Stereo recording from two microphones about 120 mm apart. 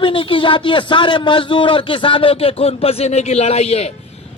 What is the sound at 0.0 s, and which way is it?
A man's voice, 45° left (ahead or behind).